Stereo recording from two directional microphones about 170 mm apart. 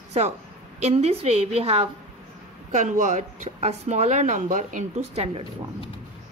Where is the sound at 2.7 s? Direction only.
45° right (ahead or behind).